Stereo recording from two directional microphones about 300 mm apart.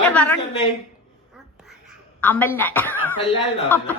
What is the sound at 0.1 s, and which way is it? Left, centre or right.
Speech, centre.